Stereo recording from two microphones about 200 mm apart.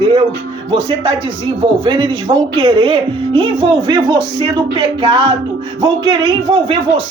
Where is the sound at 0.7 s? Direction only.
25° right (ahead or behind).